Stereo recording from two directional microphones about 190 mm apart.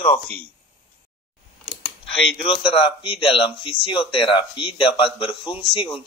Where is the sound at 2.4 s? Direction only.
25° left (ahead or behind).